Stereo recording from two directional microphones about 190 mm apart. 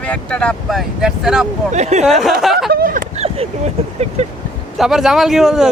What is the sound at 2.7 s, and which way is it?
Speech, 50° right (ahead or behind).